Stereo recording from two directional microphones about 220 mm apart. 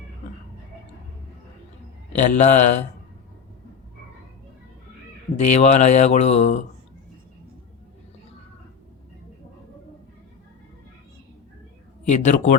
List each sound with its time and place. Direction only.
2.1 s speech: 30° left (ahead or behind)
5.4 s speech: 30° left (ahead or behind)
12.0 s speech: 35° left (ahead or behind)